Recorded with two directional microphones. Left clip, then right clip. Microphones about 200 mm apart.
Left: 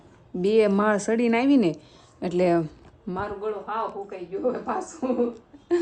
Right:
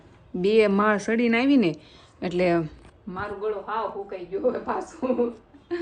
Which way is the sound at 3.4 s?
10° right (ahead or behind).